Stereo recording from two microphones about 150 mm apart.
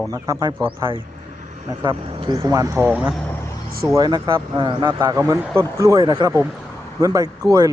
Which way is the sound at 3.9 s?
25° right (ahead or behind).